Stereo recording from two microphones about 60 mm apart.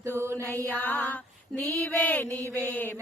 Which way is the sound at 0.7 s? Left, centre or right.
Left.